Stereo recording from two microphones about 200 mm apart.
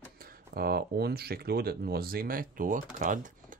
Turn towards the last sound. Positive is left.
turn(degrees=-40)  # may be behind; listen again after turning